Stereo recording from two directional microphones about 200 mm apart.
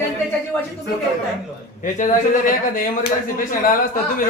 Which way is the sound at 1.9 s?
40° left (ahead or behind).